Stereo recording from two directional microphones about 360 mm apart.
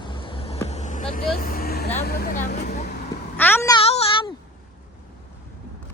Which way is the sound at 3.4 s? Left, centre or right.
Centre.